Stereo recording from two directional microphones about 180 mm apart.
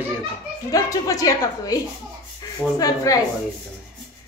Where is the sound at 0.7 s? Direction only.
20° left (ahead or behind).